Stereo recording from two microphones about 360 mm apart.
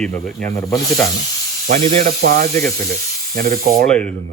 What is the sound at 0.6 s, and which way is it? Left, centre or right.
Snake, centre.